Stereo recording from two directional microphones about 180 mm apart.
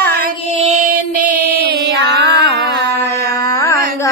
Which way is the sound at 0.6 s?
45° right (ahead or behind).